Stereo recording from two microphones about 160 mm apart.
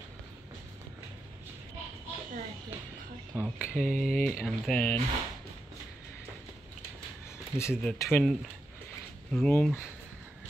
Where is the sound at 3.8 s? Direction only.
65° left (ahead or behind).